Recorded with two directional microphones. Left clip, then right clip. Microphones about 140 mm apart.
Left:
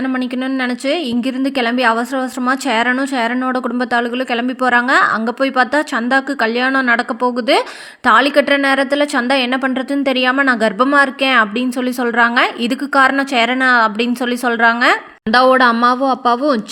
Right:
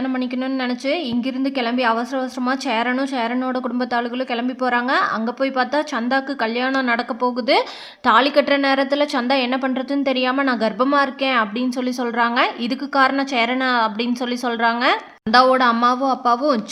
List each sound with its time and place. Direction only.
0.0 s a woman's voice: 20° left (ahead or behind)